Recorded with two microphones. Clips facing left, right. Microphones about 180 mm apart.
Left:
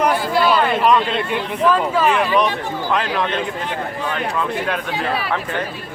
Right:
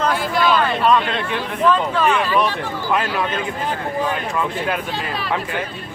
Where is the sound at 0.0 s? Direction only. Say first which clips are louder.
Left 2 dB; 10° left (ahead or behind).